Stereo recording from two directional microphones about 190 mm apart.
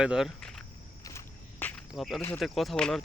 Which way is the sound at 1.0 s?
15° left (ahead or behind).